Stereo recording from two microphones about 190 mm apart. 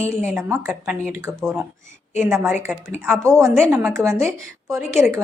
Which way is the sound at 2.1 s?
10° right (ahead or behind).